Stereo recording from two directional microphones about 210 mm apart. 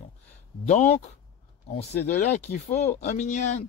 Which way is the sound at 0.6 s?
35° left (ahead or behind).